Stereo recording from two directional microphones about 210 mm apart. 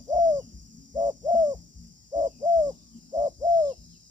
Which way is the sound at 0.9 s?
20° right (ahead or behind).